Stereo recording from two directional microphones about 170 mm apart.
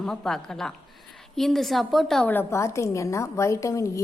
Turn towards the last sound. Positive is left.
turn(degrees=20)  # may be behind; listen again after turning